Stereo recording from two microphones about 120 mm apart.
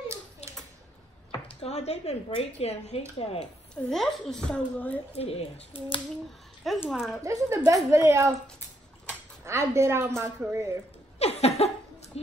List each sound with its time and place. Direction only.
1.6 s speech: 65° left (ahead or behind)
3.7 s a woman's voice: 5° left (ahead or behind)
5.1 s speech: 55° left (ahead or behind)
6.9 s speech: centre (ahead or behind)
7.2 s a woman's voice: 25° right (ahead or behind)
11.1 s a sound: 60° left (ahead or behind)